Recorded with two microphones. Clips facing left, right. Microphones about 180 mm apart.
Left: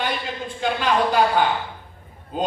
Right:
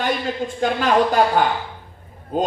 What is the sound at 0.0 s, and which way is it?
A man's voice, 45° right (ahead or behind).